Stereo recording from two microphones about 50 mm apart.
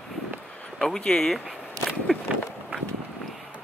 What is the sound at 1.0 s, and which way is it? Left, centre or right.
Speech, centre.